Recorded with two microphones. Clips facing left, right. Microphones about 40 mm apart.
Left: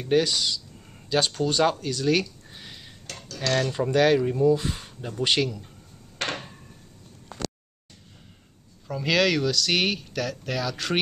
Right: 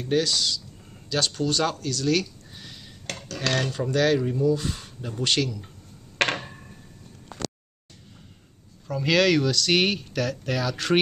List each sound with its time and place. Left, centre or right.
0.0 s speech: centre
3.3 s cutlery: right
3.7 s speech: centre
6.2 s a sound: right
8.8 s speech: centre